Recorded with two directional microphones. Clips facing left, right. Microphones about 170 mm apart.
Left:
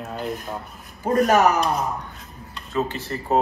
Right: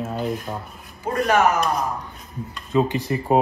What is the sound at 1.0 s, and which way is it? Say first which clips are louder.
Speech: left 2 dB; 40° left (ahead or behind).